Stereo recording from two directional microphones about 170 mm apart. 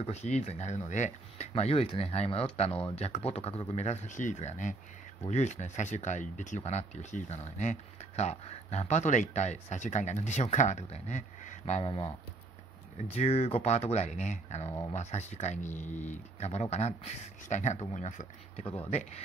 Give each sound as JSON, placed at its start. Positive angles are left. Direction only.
{"t": 0.0, "sound": "speech", "side_deg": 40}
{"t": 14.7, "sound": "speech", "side_deg": 20}
{"t": 15.0, "sound": "speech", "side_deg": 40}